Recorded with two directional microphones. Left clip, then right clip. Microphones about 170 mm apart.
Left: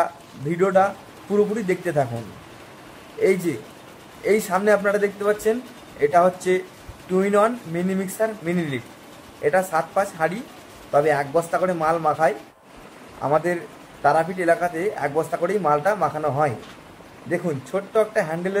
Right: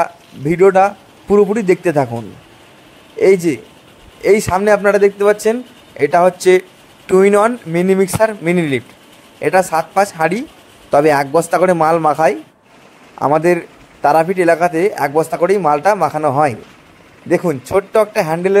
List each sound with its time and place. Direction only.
0.0 s a man's voice: 55° right (ahead or behind)
3.2 s a man's voice: 55° right (ahead or behind)